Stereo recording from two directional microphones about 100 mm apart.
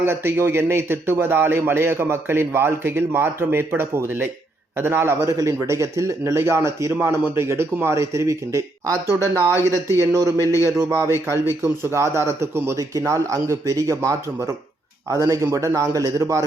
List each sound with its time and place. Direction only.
0.0 s a man's voice: 25° right (ahead or behind)